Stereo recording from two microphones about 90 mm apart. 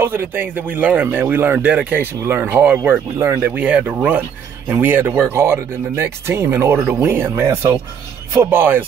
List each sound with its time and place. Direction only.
0.0 s speech: 25° right (ahead or behind)
2.9 s speech: 30° right (ahead or behind)
3.5 s speech: 15° right (ahead or behind)